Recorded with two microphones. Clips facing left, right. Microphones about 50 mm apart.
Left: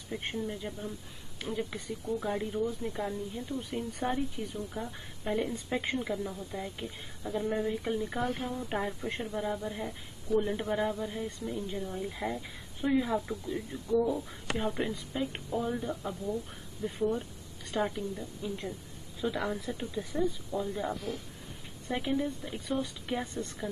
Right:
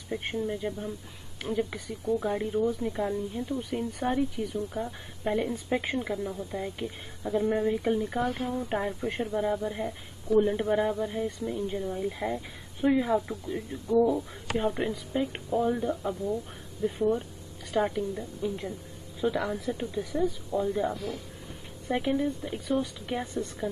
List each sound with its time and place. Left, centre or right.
0.1 s speech: centre
13.1 s speech: centre
19.4 s speech: centre
20.5 s speech: centre